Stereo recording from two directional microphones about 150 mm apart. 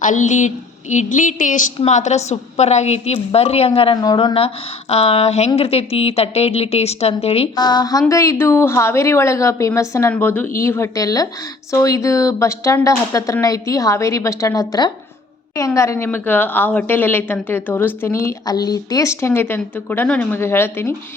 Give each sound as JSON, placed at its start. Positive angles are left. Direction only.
{"t": 0.0, "sound": "a woman's voice", "side_deg": 55}
{"t": 4.0, "sound": "speech", "side_deg": 25}
{"t": 4.4, "sound": "a woman's voice", "side_deg": 40}
{"t": 7.5, "sound": "a woman's voice", "side_deg": 30}